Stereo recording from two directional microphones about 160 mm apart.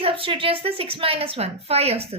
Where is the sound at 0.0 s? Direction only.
35° right (ahead or behind).